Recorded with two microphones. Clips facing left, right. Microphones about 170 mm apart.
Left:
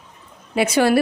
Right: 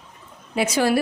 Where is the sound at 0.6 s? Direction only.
65° left (ahead or behind).